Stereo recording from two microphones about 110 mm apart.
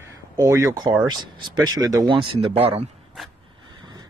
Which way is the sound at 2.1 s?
60° right (ahead or behind).